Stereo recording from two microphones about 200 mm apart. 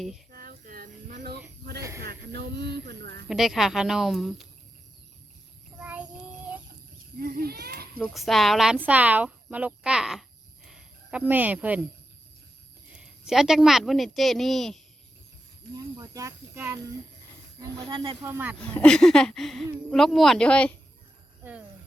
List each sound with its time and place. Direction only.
0.3 s a sound: 45° right (ahead or behind)
2.0 s speech: 50° right (ahead or behind)
3.2 s speech: centre (ahead or behind)
7.2 s a sound: 50° right (ahead or behind)
7.9 s speech: 5° left (ahead or behind)
12.9 s speech: 5° right (ahead or behind)
16.0 s speech: 15° right (ahead or behind)
17.8 s speech: 25° right (ahead or behind)
18.6 s speech: 5° left (ahead or behind)